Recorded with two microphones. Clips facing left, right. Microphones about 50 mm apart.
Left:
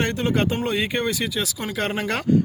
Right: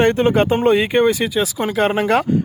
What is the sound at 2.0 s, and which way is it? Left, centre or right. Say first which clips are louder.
Speech: right 9 dB; centre.